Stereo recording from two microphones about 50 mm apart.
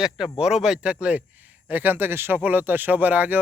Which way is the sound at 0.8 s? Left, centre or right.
Right.